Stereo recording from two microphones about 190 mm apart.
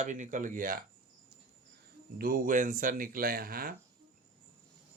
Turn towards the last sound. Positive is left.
turn(degrees=-50)  # may be behind; listen again after turning